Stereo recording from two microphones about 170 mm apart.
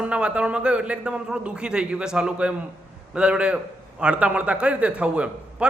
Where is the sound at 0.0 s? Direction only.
5° right (ahead or behind).